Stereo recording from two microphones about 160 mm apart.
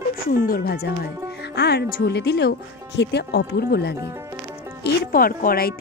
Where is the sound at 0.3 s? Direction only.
65° left (ahead or behind); by 3.9 s 90° left.